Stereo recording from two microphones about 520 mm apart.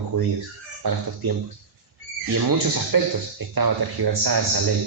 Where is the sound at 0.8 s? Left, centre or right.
Right.